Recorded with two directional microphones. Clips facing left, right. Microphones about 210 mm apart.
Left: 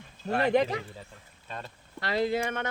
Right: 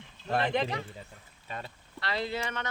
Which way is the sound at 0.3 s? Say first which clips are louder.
Left 4 dB; 40° left (ahead or behind).